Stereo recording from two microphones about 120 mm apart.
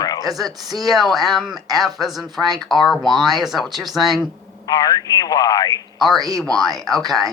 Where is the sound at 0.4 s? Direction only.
35° right (ahead or behind).